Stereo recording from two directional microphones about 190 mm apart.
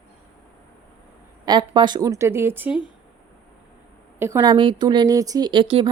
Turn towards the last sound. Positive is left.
turn(degrees=-25)  # may be behind; listen again after turning